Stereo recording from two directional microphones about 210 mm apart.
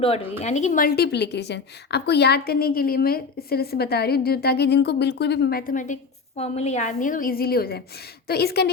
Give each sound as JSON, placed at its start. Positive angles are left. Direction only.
{"t": 0.0, "sound": "a woman's voice", "side_deg": 30}